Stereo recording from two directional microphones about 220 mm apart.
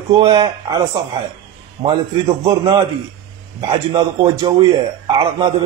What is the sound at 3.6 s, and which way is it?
A man's voice, 20° right (ahead or behind).